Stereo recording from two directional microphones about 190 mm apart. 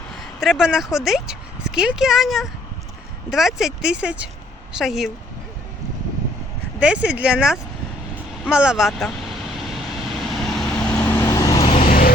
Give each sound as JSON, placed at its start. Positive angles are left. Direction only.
{"t": 0.2, "sound": "speech", "side_deg": 0}
{"t": 6.7, "sound": "speech", "side_deg": -5}
{"t": 9.6, "sound": "vehicle", "side_deg": 0}
{"t": 11.8, "sound": "vehicle", "side_deg": 50}